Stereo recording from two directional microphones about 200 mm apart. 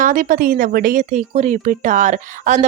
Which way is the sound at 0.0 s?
40° right (ahead or behind).